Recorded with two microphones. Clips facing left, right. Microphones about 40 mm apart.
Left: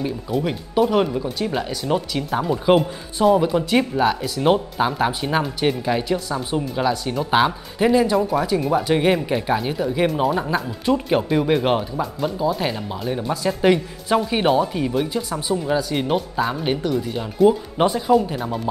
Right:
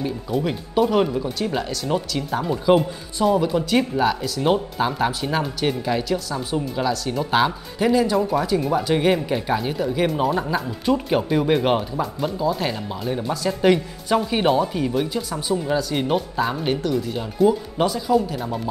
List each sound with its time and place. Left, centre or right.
0.0 s speech: centre
2.7 s speech: left
3.3 s speech: centre
17.5 s speech: left
18.1 s speech: centre